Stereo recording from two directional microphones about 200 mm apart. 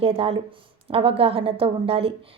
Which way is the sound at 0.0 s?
30° right (ahead or behind).